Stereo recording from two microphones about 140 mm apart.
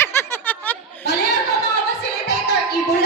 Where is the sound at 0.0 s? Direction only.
15° left (ahead or behind).